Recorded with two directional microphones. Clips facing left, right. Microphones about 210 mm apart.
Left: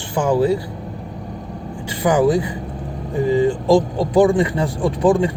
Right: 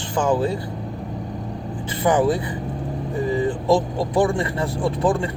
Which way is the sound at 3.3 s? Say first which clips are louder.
Left 5 dB; 15° left (ahead or behind).